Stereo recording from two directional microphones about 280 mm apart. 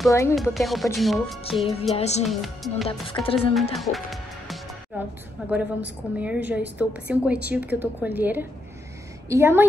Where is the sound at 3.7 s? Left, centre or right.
Centre.